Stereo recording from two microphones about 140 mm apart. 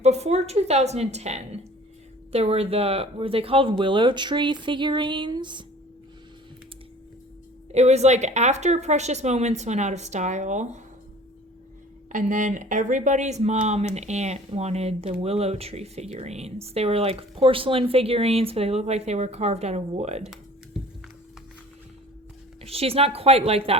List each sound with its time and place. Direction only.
0.0 s speech: 50° right (ahead or behind); by 5.6 s 35° right (ahead or behind)
7.7 s a woman's voice: 50° right (ahead or behind)
12.1 s a woman's voice: 65° right (ahead or behind); by 20.3 s 50° right (ahead or behind)
20.7 s music: 5° right (ahead or behind)
22.6 s speech: 45° right (ahead or behind)